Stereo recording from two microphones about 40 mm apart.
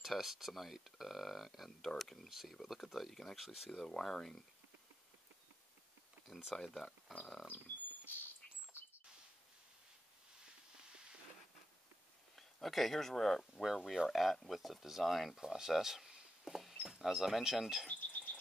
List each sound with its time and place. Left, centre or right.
0.0 s speech: centre
3.3 s speech: centre
3.7 s speech: centre
6.2 s speech: centre
6.5 s speech: centre
7.5 s a sound: left
12.4 s speech: centre
17.9 s a sound: left